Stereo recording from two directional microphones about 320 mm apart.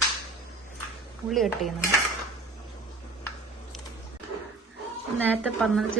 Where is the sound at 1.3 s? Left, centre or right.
Centre.